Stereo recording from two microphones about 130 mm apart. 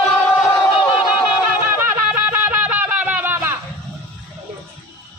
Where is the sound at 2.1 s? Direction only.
15° right (ahead or behind).